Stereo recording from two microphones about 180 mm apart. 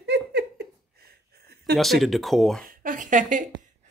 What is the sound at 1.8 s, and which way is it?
Speech, centre (ahead or behind).